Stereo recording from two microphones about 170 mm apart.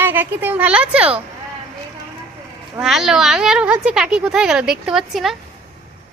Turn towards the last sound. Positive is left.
turn(degrees=0)  # may be behind; listen again after turning